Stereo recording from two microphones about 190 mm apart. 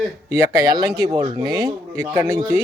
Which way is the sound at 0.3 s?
15° right (ahead or behind).